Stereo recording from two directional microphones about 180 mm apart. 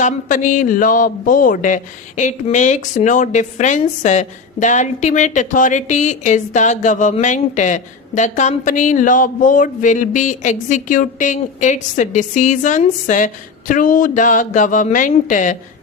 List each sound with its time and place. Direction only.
0.0 s speech: 45° left (ahead or behind)